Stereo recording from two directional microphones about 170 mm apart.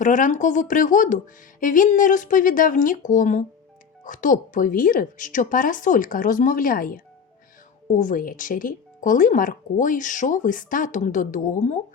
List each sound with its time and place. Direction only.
0.0 s speech: 50° left (ahead or behind)